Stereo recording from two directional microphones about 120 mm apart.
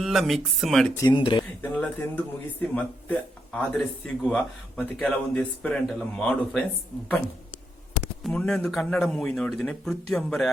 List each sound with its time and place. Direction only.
0.0 s speech: centre (ahead or behind)
1.0 s speech: 40° left (ahead or behind)
1.6 s a man's voice: 15° left (ahead or behind)
8.2 s speech: 5° left (ahead or behind)